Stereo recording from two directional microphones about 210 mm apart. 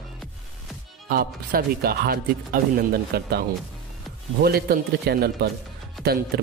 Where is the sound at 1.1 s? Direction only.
45° right (ahead or behind).